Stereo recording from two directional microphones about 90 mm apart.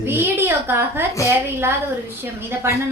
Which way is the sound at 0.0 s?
25° right (ahead or behind).